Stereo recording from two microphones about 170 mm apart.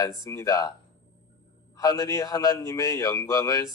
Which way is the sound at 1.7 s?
20° left (ahead or behind).